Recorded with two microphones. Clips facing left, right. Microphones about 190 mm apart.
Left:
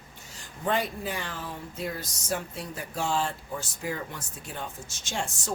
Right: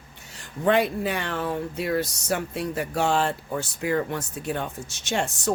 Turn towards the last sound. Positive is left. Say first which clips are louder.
# right 8 dB
turn(degrees=-65)  # may be behind; listen again after turning